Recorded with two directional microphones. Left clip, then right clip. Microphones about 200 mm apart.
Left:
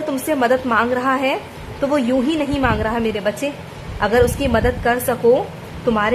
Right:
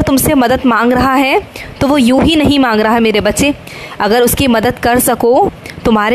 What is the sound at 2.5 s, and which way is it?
A woman's voice, 45° right (ahead or behind).